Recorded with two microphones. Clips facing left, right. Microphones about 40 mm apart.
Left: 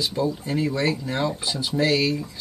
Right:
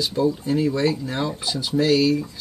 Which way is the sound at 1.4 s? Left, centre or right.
Centre.